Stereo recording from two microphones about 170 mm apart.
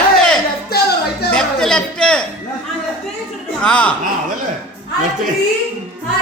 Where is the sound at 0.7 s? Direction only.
70° left (ahead or behind).